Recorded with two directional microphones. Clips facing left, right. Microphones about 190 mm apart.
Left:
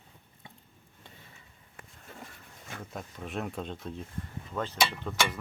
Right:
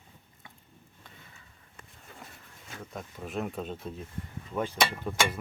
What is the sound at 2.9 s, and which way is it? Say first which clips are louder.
Speech: right 1 dB; centre (ahead or behind).